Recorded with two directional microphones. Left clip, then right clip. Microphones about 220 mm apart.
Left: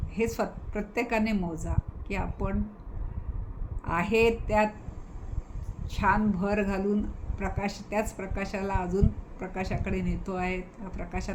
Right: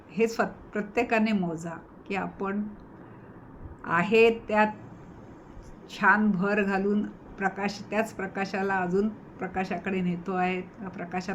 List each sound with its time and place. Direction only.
0.1 s speech: 15° left (ahead or behind)
3.8 s speech: 15° left (ahead or behind)
5.9 s speech: 15° left (ahead or behind)